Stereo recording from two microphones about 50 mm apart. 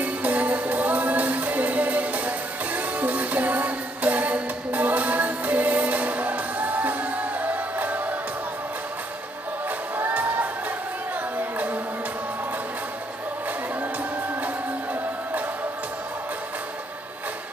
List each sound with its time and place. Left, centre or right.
0.0 s music: right
11.3 s music: right